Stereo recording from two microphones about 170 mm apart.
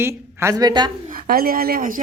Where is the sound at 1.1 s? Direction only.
60° right (ahead or behind).